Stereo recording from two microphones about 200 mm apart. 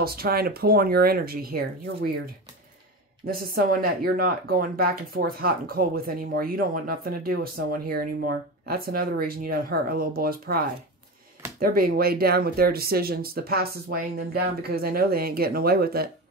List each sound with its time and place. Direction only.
0.0 s speech: 50° right (ahead or behind)
3.3 s speech: 45° right (ahead or behind)
11.6 s speech: 45° right (ahead or behind)